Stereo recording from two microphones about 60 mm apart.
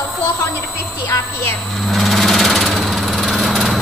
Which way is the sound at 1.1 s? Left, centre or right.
Left.